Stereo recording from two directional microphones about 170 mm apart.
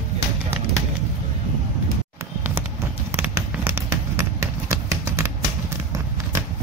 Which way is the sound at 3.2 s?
15° right (ahead or behind).